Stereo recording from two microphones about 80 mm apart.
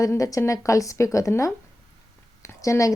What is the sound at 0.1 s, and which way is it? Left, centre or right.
A woman's voice, left.